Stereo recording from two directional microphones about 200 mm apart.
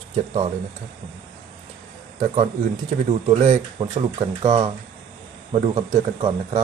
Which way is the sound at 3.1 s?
35° right (ahead or behind).